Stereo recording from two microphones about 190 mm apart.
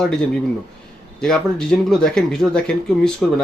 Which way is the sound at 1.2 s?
5° left (ahead or behind).